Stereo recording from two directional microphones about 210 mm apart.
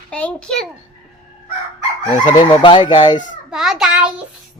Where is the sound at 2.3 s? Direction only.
25° left (ahead or behind).